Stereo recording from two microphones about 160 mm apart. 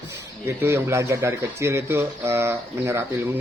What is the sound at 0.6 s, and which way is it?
Speech, 15° right (ahead or behind).